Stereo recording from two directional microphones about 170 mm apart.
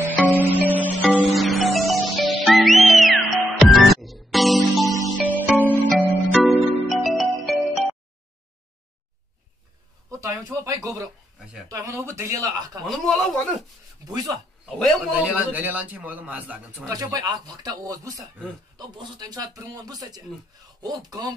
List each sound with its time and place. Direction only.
0.0 s music: 10° left (ahead or behind)
0.3 s music: 10° right (ahead or behind)
1.0 s music: centre (ahead or behind)
5.6 s music: 10° left (ahead or behind)
5.9 s music: centre (ahead or behind)
10.1 s a sound: 15° right (ahead or behind)
11.3 s a sound: 5° right (ahead or behind)
11.7 s speech: 20° right (ahead or behind)
12.8 s a man's voice: centre (ahead or behind)
14.0 s speech: 20° right (ahead or behind)
14.7 s a man's voice: centre (ahead or behind)
16.9 s speech: 25° right (ahead or behind)